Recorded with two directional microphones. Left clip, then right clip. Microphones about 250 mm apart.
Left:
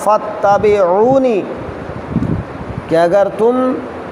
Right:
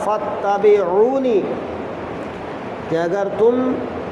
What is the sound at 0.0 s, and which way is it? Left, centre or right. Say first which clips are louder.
Speech: left 7 dB; left.